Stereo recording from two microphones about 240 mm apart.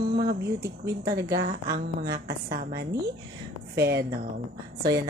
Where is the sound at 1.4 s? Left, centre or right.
Right.